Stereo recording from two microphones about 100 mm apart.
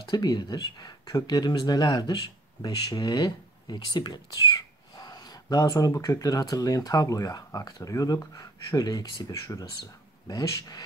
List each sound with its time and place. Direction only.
0.0 s speech: 45° left (ahead or behind)